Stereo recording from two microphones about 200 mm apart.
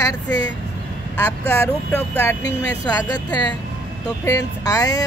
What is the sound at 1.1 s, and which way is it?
Speech, 10° left (ahead or behind).